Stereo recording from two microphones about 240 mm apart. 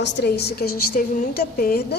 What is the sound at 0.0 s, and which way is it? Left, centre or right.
A woman's voice, left.